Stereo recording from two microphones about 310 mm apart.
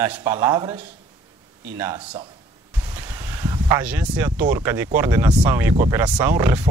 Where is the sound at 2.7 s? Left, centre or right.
Centre.